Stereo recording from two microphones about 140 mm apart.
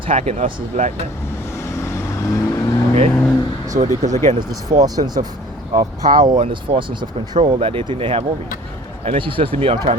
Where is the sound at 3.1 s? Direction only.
25° left (ahead or behind).